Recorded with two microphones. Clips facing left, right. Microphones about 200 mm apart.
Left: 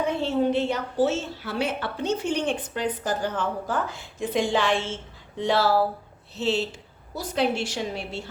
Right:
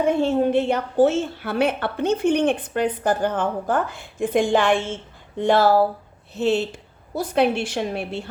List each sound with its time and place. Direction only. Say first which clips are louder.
0.0 s a woman's voice: right 5 dB; 50° right (ahead or behind)